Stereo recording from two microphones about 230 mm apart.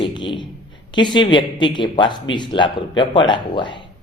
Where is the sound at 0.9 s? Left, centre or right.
Centre.